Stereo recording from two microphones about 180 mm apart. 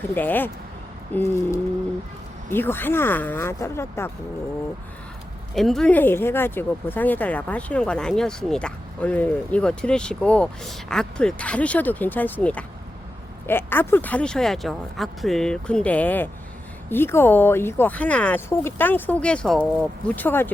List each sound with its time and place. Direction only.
0.1 s speech: 10° left (ahead or behind)
5.5 s speech: centre (ahead or behind)